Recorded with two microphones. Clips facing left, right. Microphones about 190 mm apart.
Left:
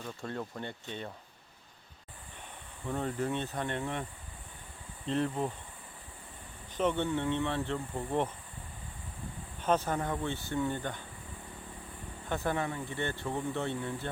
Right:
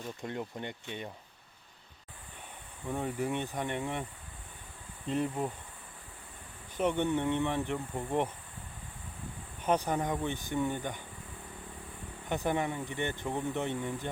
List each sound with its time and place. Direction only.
0.2 s speech: 15° right (ahead or behind)
2.8 s speech: 10° right (ahead or behind)
5.0 s speech: 10° right (ahead or behind)
6.7 s speech: 15° right (ahead or behind)
9.6 s speech: 10° right (ahead or behind)
12.3 s speech: 15° right (ahead or behind)